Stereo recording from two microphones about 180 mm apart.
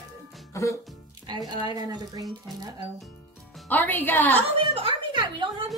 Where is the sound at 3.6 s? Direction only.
10° left (ahead or behind).